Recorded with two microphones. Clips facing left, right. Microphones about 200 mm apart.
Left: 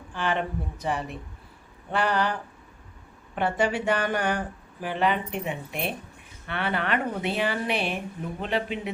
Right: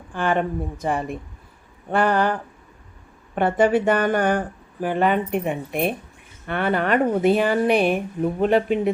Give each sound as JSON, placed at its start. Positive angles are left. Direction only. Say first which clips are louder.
{"t": 0.1, "sound": "speech", "louder": "right 6 dB", "side_deg": -50}